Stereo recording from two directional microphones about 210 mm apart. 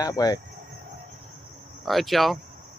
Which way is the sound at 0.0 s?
15° left (ahead or behind).